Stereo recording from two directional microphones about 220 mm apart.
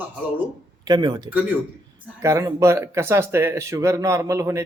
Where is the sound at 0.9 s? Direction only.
20° right (ahead or behind).